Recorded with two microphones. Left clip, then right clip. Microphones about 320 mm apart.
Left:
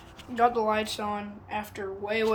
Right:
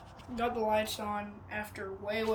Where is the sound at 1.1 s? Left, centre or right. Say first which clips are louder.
Left 4 dB; left.